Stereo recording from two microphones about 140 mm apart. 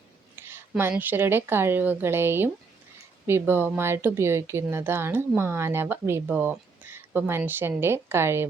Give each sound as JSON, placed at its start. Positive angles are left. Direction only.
{"t": 0.4, "sound": "a woman's voice", "side_deg": -15}